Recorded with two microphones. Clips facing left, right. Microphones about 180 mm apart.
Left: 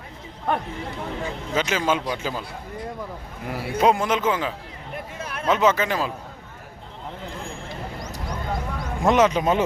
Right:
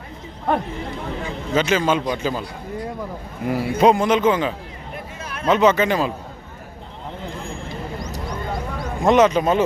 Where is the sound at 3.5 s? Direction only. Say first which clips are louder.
Right 4 dB; centre (ahead or behind).